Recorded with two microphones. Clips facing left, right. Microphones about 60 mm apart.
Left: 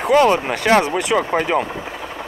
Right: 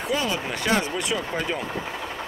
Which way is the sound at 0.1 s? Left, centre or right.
Left.